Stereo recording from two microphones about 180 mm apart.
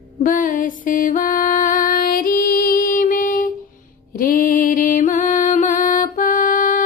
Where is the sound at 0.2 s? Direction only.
50° left (ahead or behind).